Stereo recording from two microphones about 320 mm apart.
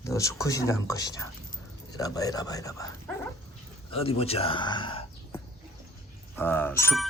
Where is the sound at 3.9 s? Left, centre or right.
Centre.